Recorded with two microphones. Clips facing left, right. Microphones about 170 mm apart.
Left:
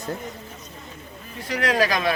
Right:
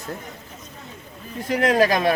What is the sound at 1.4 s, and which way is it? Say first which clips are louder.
Speech: right 4 dB; 45° right (ahead or behind).